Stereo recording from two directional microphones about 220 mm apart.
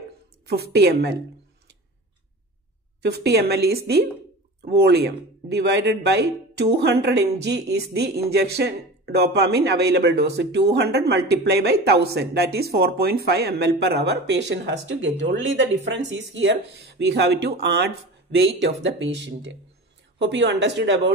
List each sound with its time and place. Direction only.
0.5 s a man's voice: 50° right (ahead or behind)
3.0 s a man's voice: 50° right (ahead or behind)